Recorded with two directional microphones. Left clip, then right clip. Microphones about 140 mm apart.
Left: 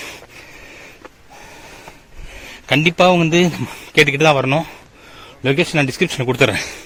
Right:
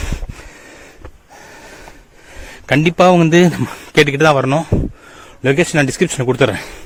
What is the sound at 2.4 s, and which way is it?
A man's voice, 45° right (ahead or behind).